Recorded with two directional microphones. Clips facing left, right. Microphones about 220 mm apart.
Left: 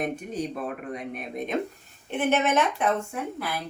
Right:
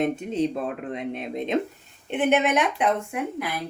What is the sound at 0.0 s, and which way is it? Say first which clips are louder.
Speech: right 6 dB; 25° right (ahead or behind).